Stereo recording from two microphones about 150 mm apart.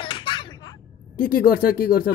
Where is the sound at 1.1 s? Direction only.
75° left (ahead or behind).